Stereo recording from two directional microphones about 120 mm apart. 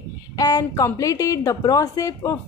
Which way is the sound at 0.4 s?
30° left (ahead or behind).